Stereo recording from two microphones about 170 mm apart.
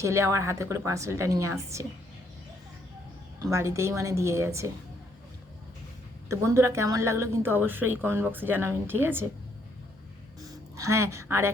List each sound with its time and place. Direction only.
0.0 s a woman's voice: 15° right (ahead or behind)
3.4 s a woman's voice: 15° right (ahead or behind)
6.2 s a woman's voice: 15° right (ahead or behind)
10.5 s a woman's voice: 20° right (ahead or behind)